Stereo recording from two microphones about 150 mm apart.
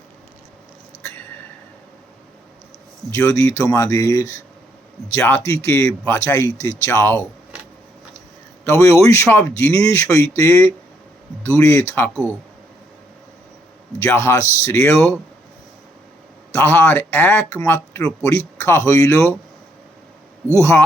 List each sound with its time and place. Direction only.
3.1 s speech: 20° left (ahead or behind)
5.5 s speech: 15° left (ahead or behind)
7.5 s keys jangling: 5° right (ahead or behind)
8.6 s speech: 20° left (ahead or behind)
14.0 s speech: 15° left (ahead or behind)
16.6 s speech: 15° left (ahead or behind)
20.5 s speech: 15° left (ahead or behind)